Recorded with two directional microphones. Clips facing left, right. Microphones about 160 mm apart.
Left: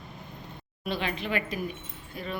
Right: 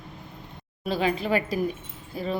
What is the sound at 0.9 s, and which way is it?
Speech, 35° right (ahead or behind).